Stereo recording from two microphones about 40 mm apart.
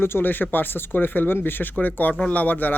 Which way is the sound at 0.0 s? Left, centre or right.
Left.